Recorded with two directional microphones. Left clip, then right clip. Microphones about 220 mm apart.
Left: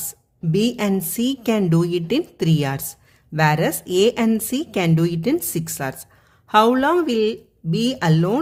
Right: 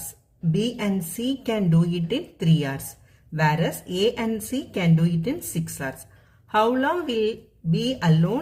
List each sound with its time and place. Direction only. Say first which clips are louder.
0.5 s a woman's voice: left 6 dB; 50° left (ahead or behind)